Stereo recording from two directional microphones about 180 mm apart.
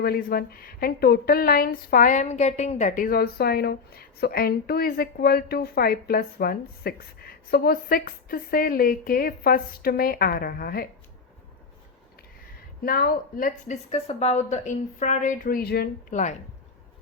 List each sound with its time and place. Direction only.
0.0 s a woman's voice: 60° left (ahead or behind)
12.8 s a woman's voice: 55° left (ahead or behind)
13.9 s a woman's voice: 35° left (ahead or behind); by 16.1 s 65° left (ahead or behind)